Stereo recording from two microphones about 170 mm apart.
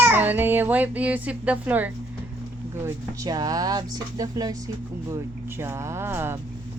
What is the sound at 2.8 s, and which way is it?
Speech, 20° right (ahead or behind).